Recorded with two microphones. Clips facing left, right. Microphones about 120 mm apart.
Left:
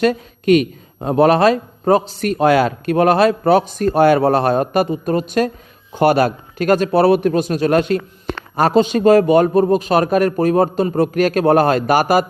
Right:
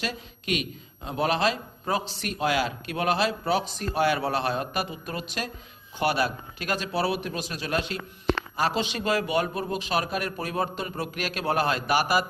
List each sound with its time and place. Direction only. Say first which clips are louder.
0.0 s a man's voice: left 17 dB; 50° left (ahead or behind)